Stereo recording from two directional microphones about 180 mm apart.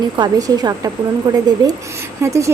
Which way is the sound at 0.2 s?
20° right (ahead or behind).